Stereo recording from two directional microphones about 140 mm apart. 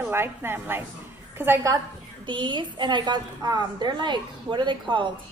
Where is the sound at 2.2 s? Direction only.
35° right (ahead or behind).